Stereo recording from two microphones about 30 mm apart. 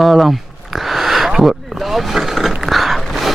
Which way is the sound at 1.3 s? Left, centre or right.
Centre.